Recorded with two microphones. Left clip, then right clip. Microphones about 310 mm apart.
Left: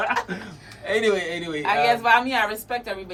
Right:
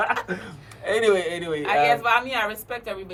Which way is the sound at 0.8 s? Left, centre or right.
Right.